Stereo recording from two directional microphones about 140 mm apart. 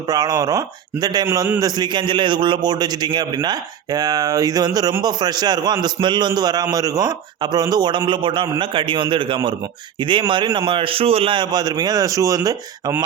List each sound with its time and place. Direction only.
0.1 s a man's voice: 30° right (ahead or behind)